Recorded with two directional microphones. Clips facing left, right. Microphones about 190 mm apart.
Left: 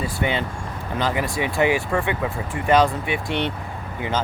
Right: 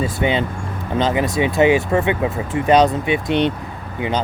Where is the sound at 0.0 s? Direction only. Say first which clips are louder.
Right 5 dB; 20° right (ahead or behind).